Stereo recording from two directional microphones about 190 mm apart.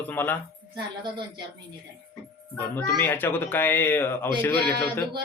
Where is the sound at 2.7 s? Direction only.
10° left (ahead or behind).